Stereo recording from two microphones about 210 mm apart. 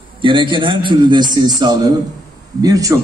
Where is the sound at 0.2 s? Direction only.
25° right (ahead or behind).